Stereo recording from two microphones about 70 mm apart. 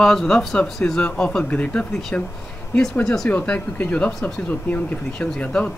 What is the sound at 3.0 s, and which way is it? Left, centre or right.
Speech, centre.